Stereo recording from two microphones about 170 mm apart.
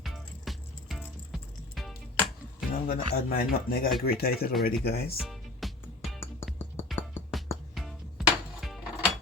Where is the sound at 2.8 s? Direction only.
60° left (ahead or behind).